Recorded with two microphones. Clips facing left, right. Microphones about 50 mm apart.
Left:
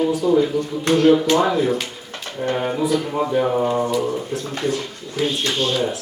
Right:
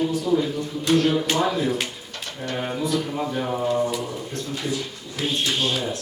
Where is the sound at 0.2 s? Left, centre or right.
Centre.